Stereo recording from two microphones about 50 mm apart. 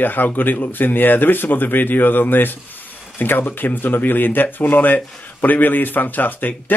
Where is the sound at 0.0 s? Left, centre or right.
Left.